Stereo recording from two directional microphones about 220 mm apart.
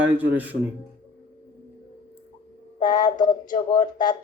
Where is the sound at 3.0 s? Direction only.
20° left (ahead or behind).